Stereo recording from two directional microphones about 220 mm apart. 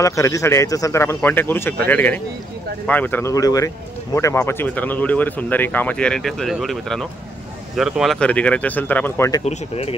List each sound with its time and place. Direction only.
0.0 s speech: 15° left (ahead or behind)
9.4 s speech: 30° left (ahead or behind)